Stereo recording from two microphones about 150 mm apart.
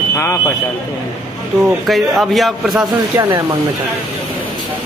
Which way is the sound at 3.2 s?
20° right (ahead or behind).